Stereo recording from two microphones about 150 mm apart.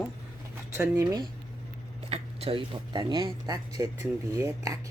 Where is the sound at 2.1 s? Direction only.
40° right (ahead or behind).